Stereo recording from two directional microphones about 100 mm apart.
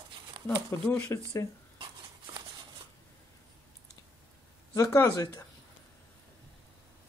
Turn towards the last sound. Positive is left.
turn(degrees=35)  # may be behind; listen again after turning